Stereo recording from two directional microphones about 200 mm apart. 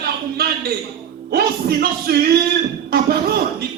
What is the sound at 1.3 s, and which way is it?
Speech, 50° right (ahead or behind).